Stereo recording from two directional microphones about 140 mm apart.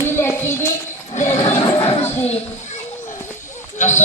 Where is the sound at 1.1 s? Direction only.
55° left (ahead or behind).